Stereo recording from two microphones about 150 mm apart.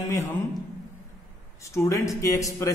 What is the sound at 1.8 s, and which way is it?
Speech, 20° left (ahead or behind).